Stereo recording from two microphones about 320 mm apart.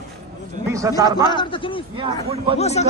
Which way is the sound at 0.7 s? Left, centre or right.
Centre.